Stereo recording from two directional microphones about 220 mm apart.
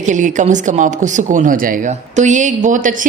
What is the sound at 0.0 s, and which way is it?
Speech, 35° right (ahead or behind).